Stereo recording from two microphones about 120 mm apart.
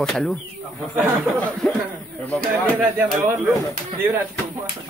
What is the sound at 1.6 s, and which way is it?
Speech, 10° left (ahead or behind).